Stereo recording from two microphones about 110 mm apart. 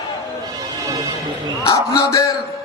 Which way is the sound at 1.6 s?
30° left (ahead or behind).